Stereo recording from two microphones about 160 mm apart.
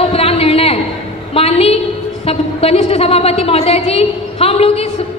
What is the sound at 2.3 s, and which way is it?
A woman's voice, 40° left (ahead or behind).